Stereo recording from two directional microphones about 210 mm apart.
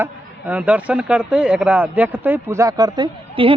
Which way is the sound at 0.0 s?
5° right (ahead or behind).